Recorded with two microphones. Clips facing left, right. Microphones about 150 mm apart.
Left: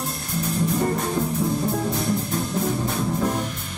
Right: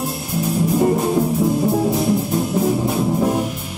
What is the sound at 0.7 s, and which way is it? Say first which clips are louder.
Music: right 10 dB; 20° right (ahead or behind).